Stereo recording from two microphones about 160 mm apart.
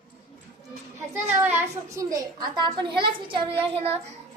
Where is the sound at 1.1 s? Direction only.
15° right (ahead or behind).